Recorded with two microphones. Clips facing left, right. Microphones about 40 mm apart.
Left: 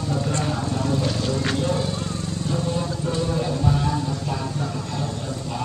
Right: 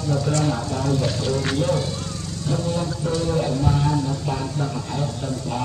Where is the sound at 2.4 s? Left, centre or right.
Centre.